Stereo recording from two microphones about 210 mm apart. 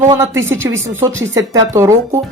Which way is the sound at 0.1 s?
15° right (ahead or behind).